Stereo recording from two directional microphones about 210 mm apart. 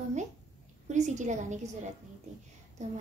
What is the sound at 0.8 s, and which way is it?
Speech, 35° right (ahead or behind).